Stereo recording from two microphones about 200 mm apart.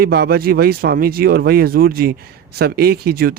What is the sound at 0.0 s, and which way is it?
Speech, 50° right (ahead or behind).